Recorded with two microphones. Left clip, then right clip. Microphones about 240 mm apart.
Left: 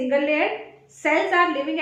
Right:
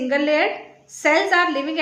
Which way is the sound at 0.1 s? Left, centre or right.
Right.